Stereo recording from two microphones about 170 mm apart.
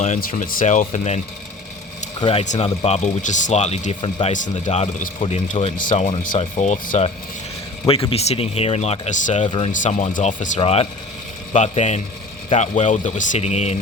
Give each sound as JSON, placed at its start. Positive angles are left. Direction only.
{"t": 0.0, "sound": "speech", "side_deg": 50}
{"t": 2.4, "sound": "speech", "side_deg": 45}
{"t": 8.1, "sound": "speech", "side_deg": 40}
{"t": 9.5, "sound": "speech", "side_deg": 35}
{"t": 9.8, "sound": "speech", "side_deg": 50}
{"t": 10.6, "sound": "speech", "side_deg": 35}